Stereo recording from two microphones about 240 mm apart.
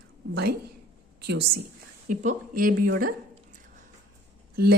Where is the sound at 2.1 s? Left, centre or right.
Right.